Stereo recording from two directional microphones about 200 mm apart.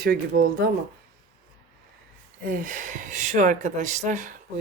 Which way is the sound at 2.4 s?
45° right (ahead or behind).